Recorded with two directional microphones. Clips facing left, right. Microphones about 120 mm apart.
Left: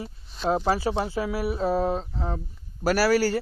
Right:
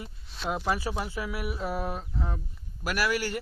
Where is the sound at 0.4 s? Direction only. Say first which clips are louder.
Left 6 dB; 30° left (ahead or behind).